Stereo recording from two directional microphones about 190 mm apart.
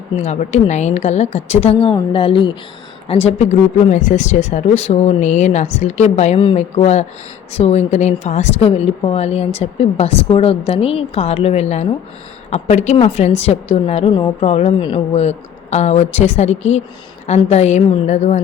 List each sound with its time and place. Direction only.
0.2 s a woman's voice: 35° left (ahead or behind)